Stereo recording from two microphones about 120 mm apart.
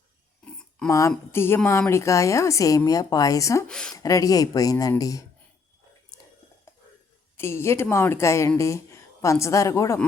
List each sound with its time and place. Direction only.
0.9 s speech: 25° left (ahead or behind)
3.7 s speech: 5° left (ahead or behind)
3.9 s speech: 30° left (ahead or behind)
7.3 s speech: 20° left (ahead or behind)